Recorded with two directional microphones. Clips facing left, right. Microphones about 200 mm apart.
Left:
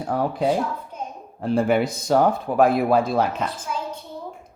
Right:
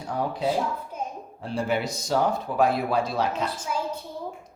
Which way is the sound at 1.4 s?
55° left (ahead or behind).